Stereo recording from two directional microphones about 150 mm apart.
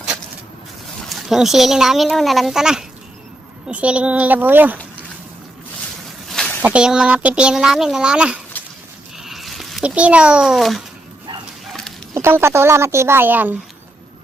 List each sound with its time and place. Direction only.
1.0 s speech: centre (ahead or behind)
6.2 s a sound: 5° left (ahead or behind)
6.7 s speech: 5° right (ahead or behind)
9.1 s a sound: centre (ahead or behind)
11.7 s dog: centre (ahead or behind)
12.1 s speech: 15° right (ahead or behind)